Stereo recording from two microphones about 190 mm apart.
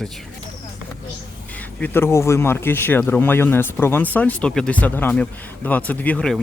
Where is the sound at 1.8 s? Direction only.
10° left (ahead or behind).